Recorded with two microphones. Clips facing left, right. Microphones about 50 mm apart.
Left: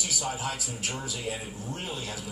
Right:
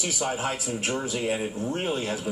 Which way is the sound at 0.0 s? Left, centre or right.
Right.